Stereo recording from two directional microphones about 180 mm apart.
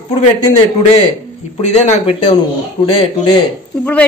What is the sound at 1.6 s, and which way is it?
Speech, 35° left (ahead or behind).